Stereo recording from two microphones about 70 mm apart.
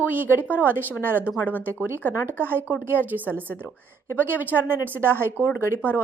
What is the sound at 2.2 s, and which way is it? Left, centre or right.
Speech, right.